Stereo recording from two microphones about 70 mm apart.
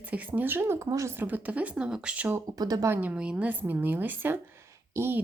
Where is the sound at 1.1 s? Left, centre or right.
Right.